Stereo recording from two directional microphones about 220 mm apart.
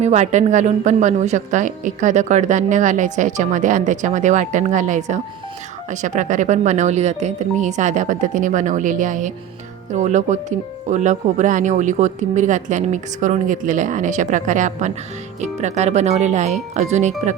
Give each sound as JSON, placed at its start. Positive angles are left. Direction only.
{"t": 0.0, "sound": "speech", "side_deg": -30}